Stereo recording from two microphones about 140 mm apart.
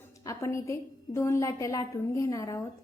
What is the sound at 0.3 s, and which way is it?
A woman's voice, 20° left (ahead or behind).